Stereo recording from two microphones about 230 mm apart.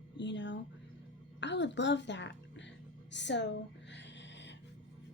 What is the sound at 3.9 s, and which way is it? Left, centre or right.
Music, left.